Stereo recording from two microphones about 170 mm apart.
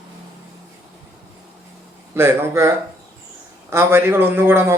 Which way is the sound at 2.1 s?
15° right (ahead or behind).